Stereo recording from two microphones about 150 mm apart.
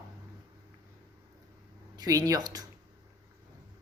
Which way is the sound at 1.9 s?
25° right (ahead or behind).